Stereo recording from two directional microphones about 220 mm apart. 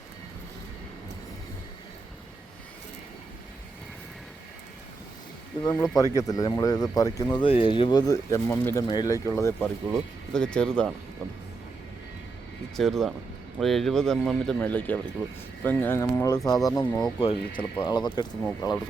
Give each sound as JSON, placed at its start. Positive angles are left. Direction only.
{"t": 5.6, "sound": "speech", "side_deg": 15}
{"t": 12.7, "sound": "speech", "side_deg": 0}